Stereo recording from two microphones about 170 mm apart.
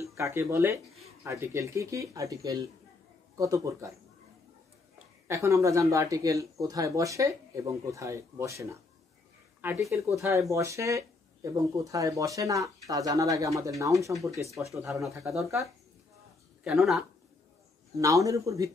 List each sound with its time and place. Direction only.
0.1 s speech: 15° right (ahead or behind)
5.3 s speech: 15° right (ahead or behind)
14.9 s speech: centre (ahead or behind)
16.6 s speech: centre (ahead or behind)
17.9 s speech: 20° right (ahead or behind)